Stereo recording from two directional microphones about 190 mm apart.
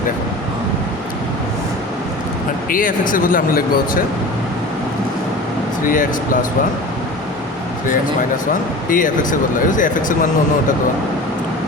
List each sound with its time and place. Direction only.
2.6 s speech: 45° left (ahead or behind)
5.8 s speech: 45° left (ahead or behind)
8.9 s speech: 45° left (ahead or behind)